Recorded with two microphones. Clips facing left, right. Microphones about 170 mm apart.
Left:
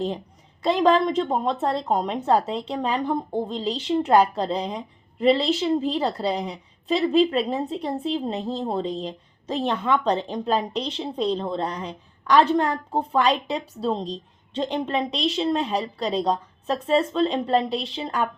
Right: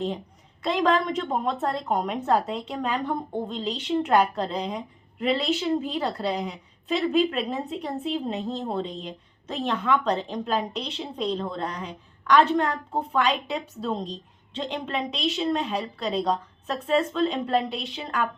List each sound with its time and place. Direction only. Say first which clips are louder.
0.6 s a woman's voice: left 4 dB; 30° left (ahead or behind)